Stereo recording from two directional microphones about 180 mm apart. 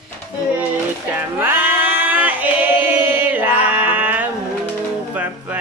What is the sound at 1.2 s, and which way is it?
Singing, 10° right (ahead or behind).